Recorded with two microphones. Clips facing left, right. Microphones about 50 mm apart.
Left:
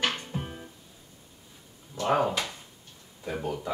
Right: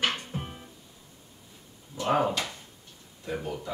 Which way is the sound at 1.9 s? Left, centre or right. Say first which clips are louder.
Even; centre.